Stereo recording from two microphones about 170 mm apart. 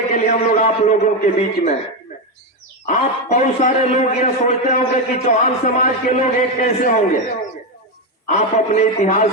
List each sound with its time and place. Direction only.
0.1 s a man's voice: 45° left (ahead or behind)
2.9 s a man's voice: 45° left (ahead or behind)
8.3 s a man's voice: 45° left (ahead or behind)